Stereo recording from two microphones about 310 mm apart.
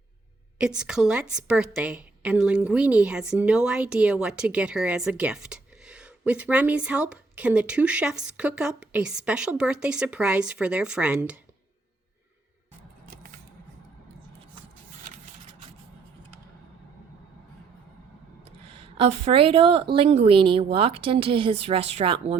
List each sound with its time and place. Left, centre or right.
0.6 s a woman's voice: centre
18.9 s a woman's voice: centre